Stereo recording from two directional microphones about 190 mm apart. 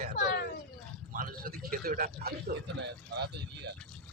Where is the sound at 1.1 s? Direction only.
50° right (ahead or behind).